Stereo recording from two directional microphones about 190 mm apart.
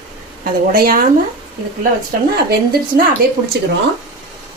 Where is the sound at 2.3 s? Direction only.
55° right (ahead or behind).